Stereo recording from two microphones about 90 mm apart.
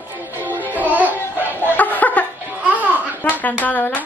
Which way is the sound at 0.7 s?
20° right (ahead or behind).